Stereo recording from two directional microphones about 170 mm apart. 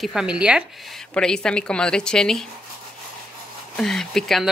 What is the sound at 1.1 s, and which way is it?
Speech, 5° left (ahead or behind).